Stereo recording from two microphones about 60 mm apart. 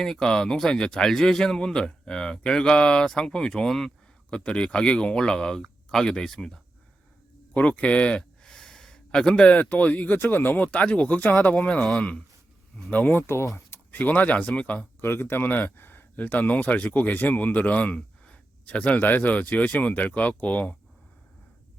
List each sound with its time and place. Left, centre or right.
0.0 s speech: centre
7.5 s speech: left
10.2 s speech: left
10.7 s speech: left
13.2 s speech: left
13.9 s speech: left
15.0 s speech: left